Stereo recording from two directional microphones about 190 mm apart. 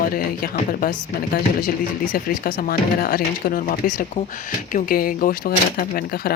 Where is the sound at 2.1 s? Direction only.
50° left (ahead or behind).